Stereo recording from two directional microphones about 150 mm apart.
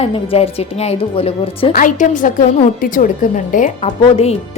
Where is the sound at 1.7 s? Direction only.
60° left (ahead or behind).